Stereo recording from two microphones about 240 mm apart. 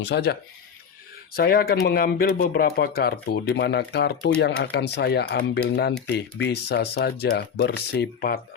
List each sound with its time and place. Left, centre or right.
0.0 s speech: left